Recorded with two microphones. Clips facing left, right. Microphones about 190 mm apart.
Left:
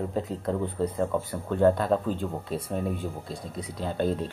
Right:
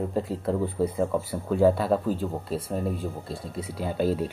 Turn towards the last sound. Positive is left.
turn(degrees=-5)  # may be behind; listen again after turning